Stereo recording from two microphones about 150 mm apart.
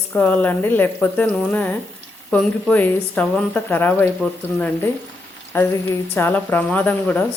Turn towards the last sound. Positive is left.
turn(degrees=10)  # may be behind; listen again after turning